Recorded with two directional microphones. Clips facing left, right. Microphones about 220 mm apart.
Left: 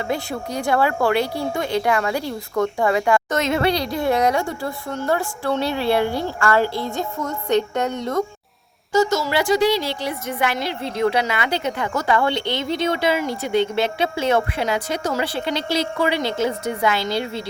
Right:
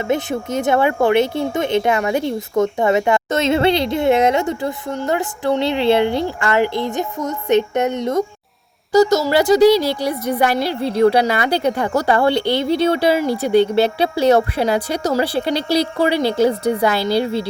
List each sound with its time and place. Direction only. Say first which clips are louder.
0.1 s speech: right 5 dB; 20° right (ahead or behind)
8.9 s a woman's voice: right 6 dB; 40° right (ahead or behind)